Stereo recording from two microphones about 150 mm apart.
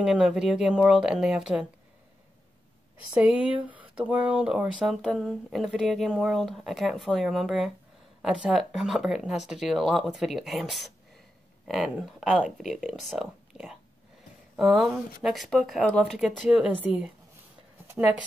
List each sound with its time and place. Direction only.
0.0 s speech: centre (ahead or behind)
3.2 s speech: 10° right (ahead or behind)